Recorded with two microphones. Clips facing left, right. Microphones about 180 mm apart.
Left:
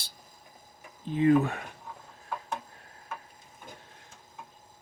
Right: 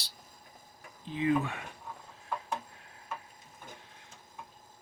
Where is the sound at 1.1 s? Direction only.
45° left (ahead or behind).